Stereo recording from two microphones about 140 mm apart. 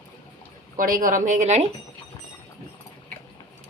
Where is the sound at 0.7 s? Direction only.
80° right; by 1.7 s 55° right (ahead or behind).